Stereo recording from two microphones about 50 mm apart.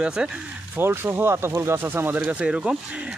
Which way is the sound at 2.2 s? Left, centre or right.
Right.